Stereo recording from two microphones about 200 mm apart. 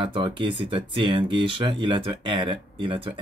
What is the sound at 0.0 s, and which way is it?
Speech, 25° right (ahead or behind).